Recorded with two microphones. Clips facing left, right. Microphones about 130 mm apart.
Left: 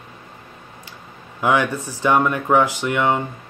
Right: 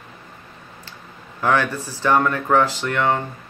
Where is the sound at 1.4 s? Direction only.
15° left (ahead or behind).